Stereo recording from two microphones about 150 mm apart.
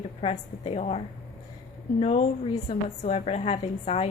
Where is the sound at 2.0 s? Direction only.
45° left (ahead or behind).